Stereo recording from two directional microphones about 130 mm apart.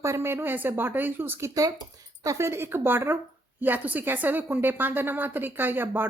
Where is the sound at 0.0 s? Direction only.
20° right (ahead or behind).